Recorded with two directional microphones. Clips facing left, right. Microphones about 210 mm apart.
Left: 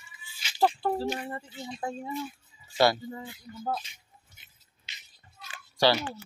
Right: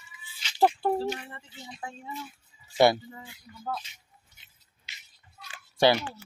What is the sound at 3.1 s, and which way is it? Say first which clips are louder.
Speech: left 6 dB; 35° left (ahead or behind).